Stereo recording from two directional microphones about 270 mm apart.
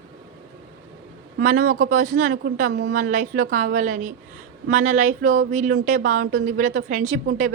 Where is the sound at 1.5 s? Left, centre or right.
Right.